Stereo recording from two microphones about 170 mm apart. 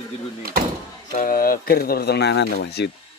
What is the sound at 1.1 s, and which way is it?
Speech, 55° left (ahead or behind).